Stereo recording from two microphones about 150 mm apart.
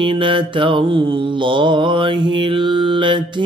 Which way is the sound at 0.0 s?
35° right (ahead or behind).